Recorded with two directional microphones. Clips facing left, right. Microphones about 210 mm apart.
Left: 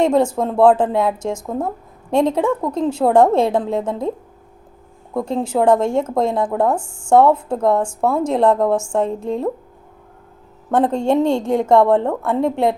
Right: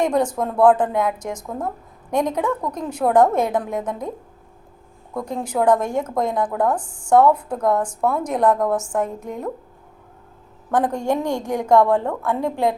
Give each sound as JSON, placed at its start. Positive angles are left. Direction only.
{"t": 0.0, "sound": "speech", "side_deg": 25}
{"t": 5.1, "sound": "speech", "side_deg": 25}
{"t": 10.7, "sound": "speech", "side_deg": 25}